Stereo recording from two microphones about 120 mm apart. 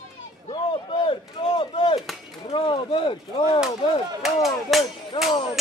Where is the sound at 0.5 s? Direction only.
40° left (ahead or behind).